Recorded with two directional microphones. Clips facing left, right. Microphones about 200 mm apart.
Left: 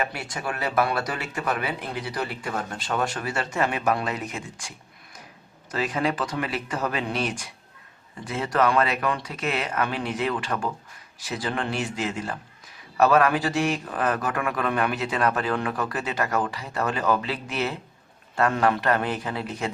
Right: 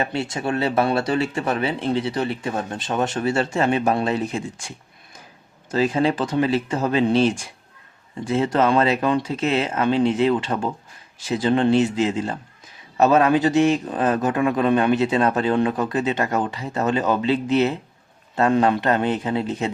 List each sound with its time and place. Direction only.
0.0 s speech: 25° right (ahead or behind)
5.7 s speech: 30° right (ahead or behind)